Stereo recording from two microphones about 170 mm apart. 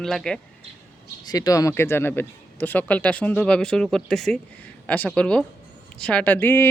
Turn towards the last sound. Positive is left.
turn(degrees=10)  # may be behind; listen again after turning